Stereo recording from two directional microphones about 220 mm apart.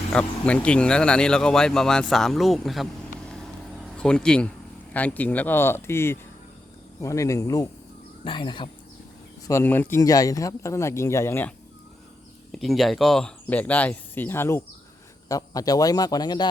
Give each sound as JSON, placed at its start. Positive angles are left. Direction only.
{"t": 0.1, "sound": "speech", "side_deg": 5}
{"t": 3.2, "sound": "vehicle", "side_deg": 5}
{"t": 3.9, "sound": "speech", "side_deg": 5}
{"t": 9.5, "sound": "speech", "side_deg": 10}
{"t": 12.5, "sound": "speech", "side_deg": 0}